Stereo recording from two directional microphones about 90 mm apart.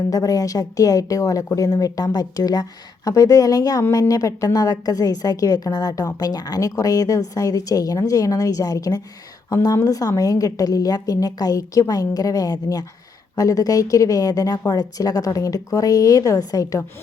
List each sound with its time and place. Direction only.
0.1 s a woman's voice: 40° left (ahead or behind)